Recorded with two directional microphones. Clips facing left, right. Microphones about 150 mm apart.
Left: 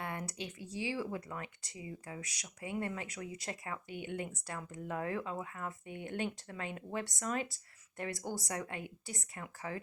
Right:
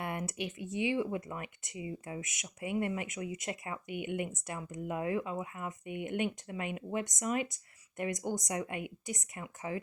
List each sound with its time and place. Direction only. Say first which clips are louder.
0.0 s speech: right 4 dB; 25° right (ahead or behind)